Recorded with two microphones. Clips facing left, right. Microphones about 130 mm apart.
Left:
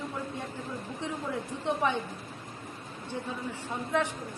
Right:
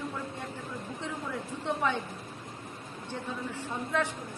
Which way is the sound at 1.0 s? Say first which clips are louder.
Left 3 dB; 20° left (ahead or behind).